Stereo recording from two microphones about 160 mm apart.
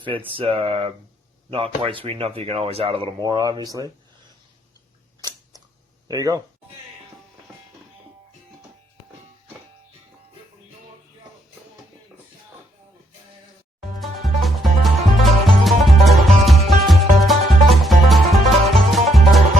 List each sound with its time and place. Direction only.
0.3 s speech: 35° right (ahead or behind)
6.1 s speech: 20° right (ahead or behind)
14.0 s music: centre (ahead or behind)